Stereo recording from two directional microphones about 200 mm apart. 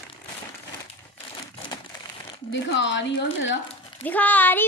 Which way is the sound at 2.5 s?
60° left (ahead or behind).